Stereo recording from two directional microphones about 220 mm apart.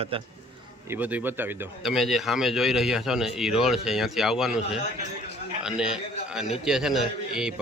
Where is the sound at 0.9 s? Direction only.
5° right (ahead or behind).